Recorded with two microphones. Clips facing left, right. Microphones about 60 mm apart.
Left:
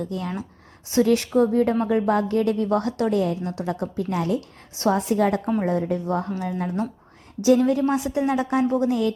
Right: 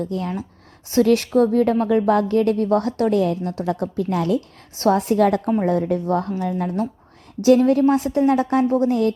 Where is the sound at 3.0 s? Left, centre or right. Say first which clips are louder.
Right 3 dB; right.